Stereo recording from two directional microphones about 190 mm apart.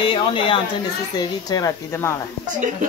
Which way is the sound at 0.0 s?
25° left (ahead or behind).